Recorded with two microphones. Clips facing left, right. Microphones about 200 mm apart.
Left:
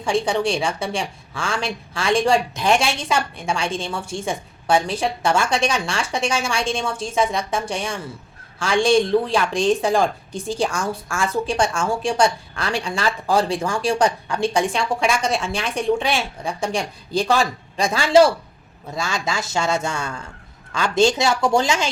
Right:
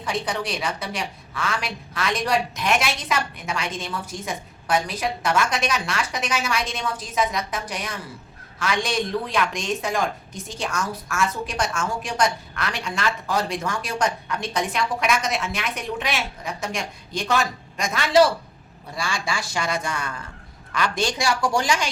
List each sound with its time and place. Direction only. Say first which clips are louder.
0.0 s a woman's voice: left 7 dB; 30° left (ahead or behind)